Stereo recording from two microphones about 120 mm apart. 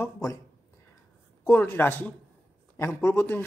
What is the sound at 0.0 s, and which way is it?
Speech, 25° left (ahead or behind).